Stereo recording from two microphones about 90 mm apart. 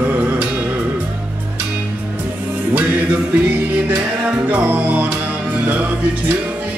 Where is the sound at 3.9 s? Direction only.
20° right (ahead or behind).